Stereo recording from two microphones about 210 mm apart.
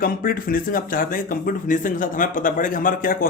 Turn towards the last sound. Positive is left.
turn(degrees=40)  # may be behind; listen again after turning